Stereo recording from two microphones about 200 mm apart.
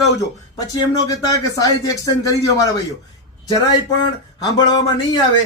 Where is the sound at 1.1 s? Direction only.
15° left (ahead or behind).